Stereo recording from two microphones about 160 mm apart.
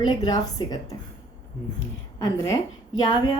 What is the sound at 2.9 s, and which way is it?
Speech, 25° left (ahead or behind).